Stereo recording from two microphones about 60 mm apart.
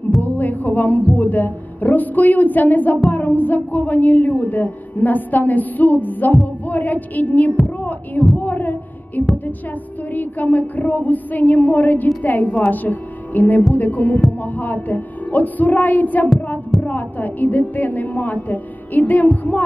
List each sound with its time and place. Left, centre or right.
0.2 s heart sounds: left
1.1 s speech: left
7.8 s heart sounds: left
8.4 s a sound: left
10.1 s speech: left